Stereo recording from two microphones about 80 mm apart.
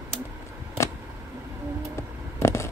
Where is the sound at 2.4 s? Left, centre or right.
Left.